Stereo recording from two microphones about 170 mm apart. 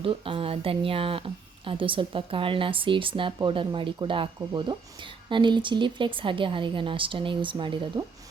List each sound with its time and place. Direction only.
0.0 s speech: 30° right (ahead or behind)